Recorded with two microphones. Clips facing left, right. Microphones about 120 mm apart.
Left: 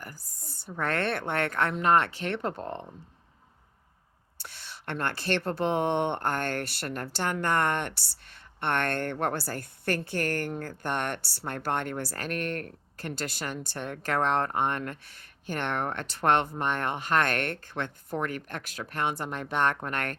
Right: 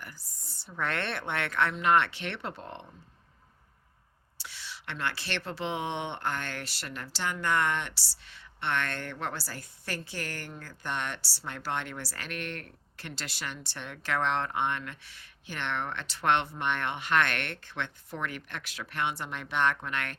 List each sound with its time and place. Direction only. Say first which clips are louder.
0.0 s a woman's voice: left 3 dB; 45° left (ahead or behind)
4.4 s a woman's voice: even; 50° left (ahead or behind)